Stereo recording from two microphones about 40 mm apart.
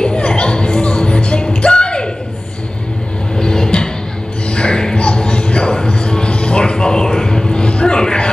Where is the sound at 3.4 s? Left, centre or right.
Centre.